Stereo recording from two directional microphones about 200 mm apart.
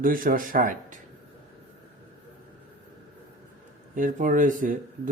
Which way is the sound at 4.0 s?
40° right (ahead or behind).